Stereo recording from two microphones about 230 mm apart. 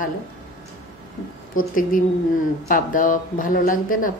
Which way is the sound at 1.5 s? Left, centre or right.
Left.